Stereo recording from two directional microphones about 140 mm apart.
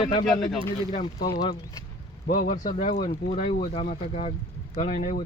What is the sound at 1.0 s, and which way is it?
Speech, 35° left (ahead or behind).